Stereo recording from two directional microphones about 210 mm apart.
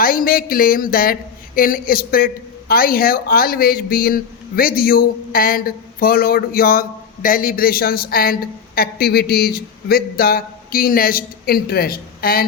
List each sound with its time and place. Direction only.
0.0 s speech: 45° left (ahead or behind)